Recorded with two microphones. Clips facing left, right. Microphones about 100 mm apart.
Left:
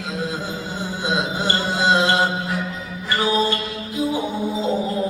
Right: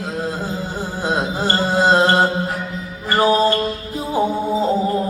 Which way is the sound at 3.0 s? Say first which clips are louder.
Right 5 dB; 45° right (ahead or behind).